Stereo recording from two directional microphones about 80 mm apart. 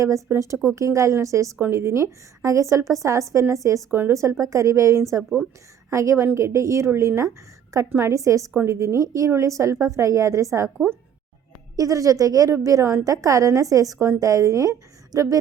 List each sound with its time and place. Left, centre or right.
0.0 s a woman's voice: right
11.8 s a woman's voice: right